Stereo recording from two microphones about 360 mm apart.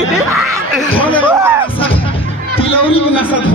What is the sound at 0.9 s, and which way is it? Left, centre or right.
Speech, centre.